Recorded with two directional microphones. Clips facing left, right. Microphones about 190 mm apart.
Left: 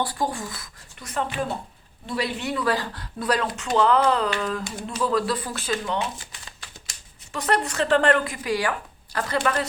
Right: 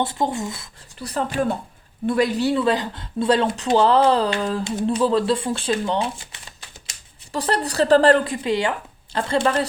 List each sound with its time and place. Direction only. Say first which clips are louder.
0.0 s speech: right 4 dB; 25° right (ahead or behind)
7.3 s a woman's voice: right 3 dB; 35° right (ahead or behind)